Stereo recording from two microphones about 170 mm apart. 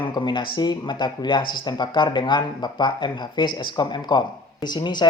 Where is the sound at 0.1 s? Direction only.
25° left (ahead or behind).